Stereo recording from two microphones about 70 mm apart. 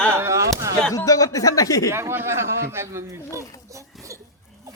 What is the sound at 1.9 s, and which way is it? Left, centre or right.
A man's voice, right.